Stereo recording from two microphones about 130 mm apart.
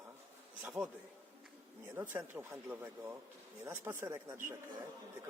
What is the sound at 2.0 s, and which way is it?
Speech, 15° right (ahead or behind).